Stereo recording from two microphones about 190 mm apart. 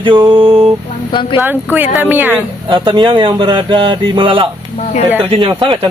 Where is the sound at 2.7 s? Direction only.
25° right (ahead or behind).